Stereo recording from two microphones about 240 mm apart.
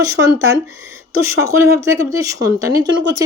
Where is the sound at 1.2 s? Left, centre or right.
Centre.